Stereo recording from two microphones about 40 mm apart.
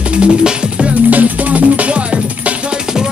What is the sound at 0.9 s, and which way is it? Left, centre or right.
Music, right.